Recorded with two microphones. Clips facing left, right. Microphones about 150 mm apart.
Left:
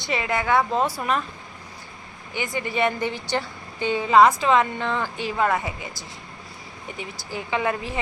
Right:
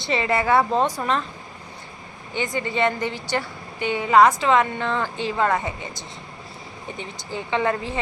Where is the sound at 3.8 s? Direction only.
20° right (ahead or behind).